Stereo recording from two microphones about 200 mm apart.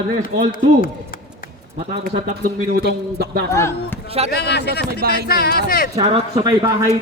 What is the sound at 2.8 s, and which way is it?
Speech, 50° right (ahead or behind).